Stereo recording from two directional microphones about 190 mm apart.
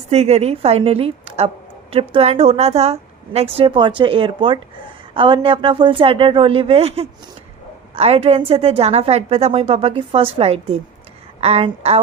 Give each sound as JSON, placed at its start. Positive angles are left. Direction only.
{"t": 0.1, "sound": "a woman's voice", "side_deg": -35}